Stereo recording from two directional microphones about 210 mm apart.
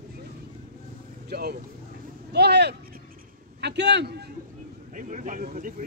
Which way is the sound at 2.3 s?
50° right (ahead or behind).